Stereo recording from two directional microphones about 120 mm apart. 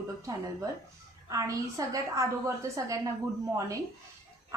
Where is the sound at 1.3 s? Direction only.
30° right (ahead or behind).